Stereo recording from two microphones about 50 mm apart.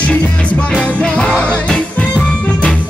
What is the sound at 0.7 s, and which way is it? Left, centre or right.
Music, left.